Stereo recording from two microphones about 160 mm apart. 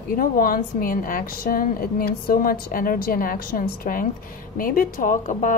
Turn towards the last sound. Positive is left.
turn(degrees=55)  # may be behind; listen again after turning